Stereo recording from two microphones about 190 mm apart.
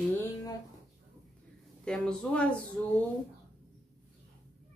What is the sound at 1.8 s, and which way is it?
Speech, 5° left (ahead or behind).